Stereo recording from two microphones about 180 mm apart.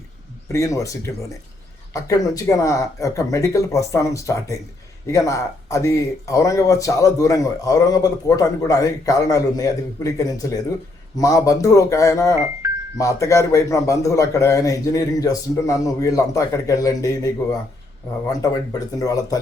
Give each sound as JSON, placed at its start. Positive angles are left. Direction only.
{"t": 0.4, "sound": "a man's voice", "side_deg": 15}